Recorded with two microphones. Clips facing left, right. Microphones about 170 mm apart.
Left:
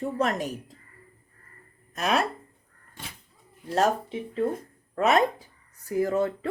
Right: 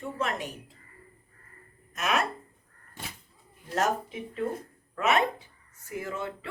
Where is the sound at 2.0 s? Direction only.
35° left (ahead or behind).